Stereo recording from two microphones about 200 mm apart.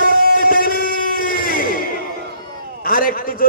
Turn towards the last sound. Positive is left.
turn(degrees=45)  # may be behind; listen again after turning